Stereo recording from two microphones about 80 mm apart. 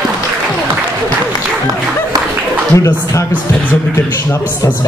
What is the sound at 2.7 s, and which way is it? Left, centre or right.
Speech, left.